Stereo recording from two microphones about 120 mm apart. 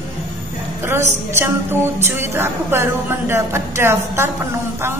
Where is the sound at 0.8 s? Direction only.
20° right (ahead or behind).